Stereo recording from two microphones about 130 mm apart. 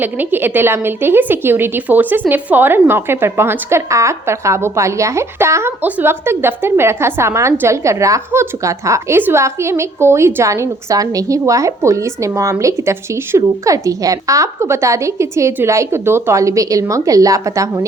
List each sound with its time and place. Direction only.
0.0 s a woman's voice: 15° right (ahead or behind)